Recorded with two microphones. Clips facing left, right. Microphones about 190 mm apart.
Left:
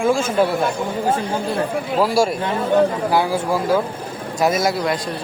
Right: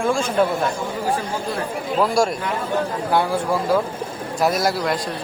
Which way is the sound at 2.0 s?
5° left (ahead or behind).